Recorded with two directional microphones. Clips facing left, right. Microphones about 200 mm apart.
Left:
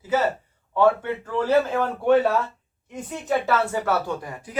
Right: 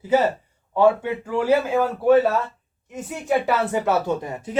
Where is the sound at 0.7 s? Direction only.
15° right (ahead or behind).